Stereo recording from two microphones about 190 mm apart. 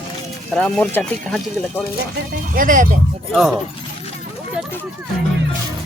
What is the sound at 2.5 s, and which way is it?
Speech, 45° right (ahead or behind).